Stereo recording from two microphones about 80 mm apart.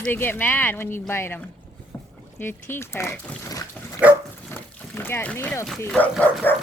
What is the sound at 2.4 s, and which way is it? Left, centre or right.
Speech, left.